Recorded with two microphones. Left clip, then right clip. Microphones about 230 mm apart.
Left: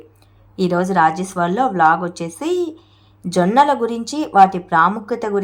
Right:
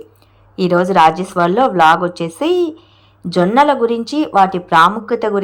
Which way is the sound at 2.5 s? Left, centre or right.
Right.